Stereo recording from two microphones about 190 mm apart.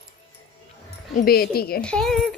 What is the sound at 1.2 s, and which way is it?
Speech, 50° left (ahead or behind).